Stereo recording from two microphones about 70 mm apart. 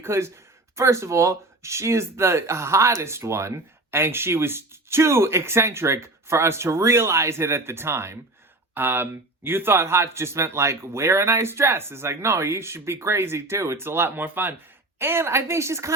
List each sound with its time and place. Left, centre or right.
0.0 s speech: right